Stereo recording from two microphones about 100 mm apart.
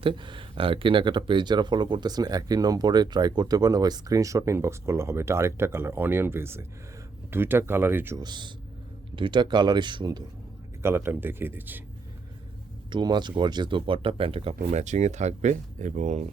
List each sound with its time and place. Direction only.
0.0 s speech: 55° right (ahead or behind); by 8.2 s 25° right (ahead or behind)
8.2 s speech: 50° right (ahead or behind)
10.8 s speech: 20° right (ahead or behind)
12.9 s speech: 45° right (ahead or behind); by 14.8 s 85° right